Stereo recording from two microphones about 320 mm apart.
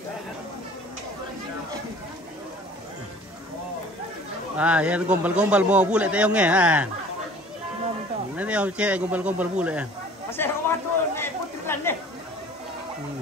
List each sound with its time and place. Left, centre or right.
4.6 s a man's voice: centre
8.4 s a man's voice: centre
10.3 s chatter: centre